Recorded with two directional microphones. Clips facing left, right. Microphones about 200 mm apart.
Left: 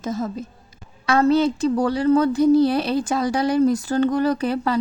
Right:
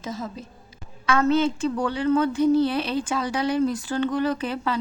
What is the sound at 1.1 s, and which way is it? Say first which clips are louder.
A woman's voice: left 3 dB; 35° left (ahead or behind).